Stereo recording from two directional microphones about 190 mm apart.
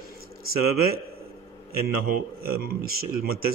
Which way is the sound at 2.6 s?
50° right (ahead or behind).